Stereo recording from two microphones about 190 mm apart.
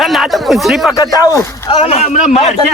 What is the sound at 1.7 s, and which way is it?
Speech, 35° left (ahead or behind).